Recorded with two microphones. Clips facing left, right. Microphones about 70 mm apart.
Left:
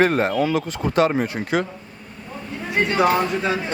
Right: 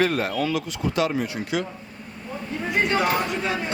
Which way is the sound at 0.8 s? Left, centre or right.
Left.